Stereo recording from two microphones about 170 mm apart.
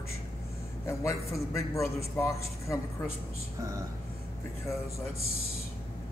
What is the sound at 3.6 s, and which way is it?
Speech, 20° right (ahead or behind).